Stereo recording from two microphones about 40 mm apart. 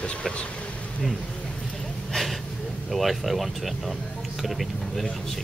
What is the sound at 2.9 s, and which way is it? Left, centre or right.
Speech, centre.